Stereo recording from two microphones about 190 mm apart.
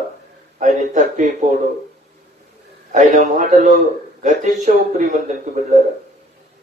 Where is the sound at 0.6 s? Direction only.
40° right (ahead or behind).